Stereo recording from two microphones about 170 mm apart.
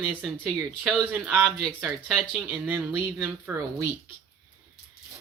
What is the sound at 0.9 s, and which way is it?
Speech, 5° right (ahead or behind).